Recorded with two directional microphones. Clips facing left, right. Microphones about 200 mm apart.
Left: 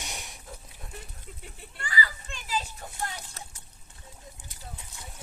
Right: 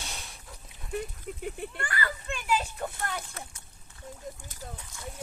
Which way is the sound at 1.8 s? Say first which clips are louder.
Left 3 dB; 60° right (ahead or behind).